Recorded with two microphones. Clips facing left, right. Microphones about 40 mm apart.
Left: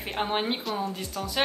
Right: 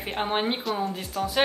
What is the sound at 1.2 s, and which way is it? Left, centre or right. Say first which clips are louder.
Speech: right 7 dB; centre.